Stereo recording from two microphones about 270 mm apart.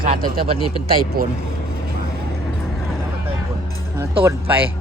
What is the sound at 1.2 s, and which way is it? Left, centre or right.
Speech, right.